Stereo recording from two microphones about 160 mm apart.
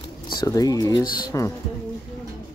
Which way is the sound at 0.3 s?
25° left (ahead or behind).